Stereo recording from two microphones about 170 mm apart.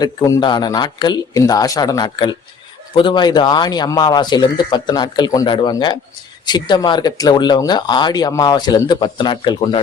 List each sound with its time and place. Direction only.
0.0 s speech: 25° left (ahead or behind)